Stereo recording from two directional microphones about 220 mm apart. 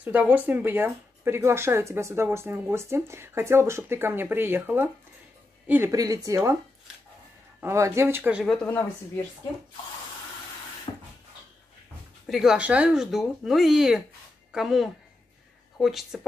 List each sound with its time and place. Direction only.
0.0 s speech: 5° right (ahead or behind)
7.6 s speech: 15° right (ahead or behind)
8.6 s speech: 10° left (ahead or behind)
10.9 s a sound: 20° left (ahead or behind)
12.3 s a woman's voice: centre (ahead or behind)